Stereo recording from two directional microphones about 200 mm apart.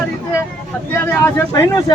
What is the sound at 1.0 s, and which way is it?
Speech, 10° left (ahead or behind).